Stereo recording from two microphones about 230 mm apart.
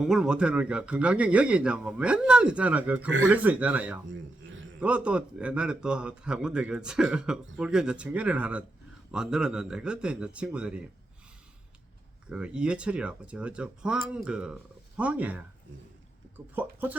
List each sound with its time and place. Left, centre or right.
0.0 s speech: centre
12.3 s speech: centre